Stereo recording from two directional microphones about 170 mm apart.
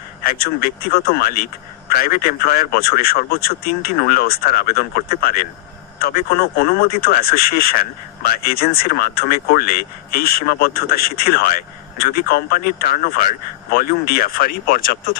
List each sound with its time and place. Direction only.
0.2 s speech: 60° left (ahead or behind)